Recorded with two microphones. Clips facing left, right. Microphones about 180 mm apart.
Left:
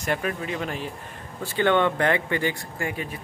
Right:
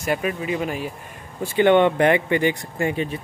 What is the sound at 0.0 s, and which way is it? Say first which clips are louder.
Speech: right 3 dB; 10° right (ahead or behind).